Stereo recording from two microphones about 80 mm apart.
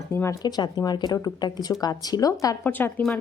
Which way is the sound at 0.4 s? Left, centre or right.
Left.